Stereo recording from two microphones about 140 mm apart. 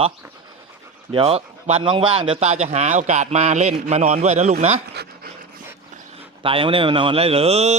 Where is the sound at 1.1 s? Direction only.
40° right (ahead or behind).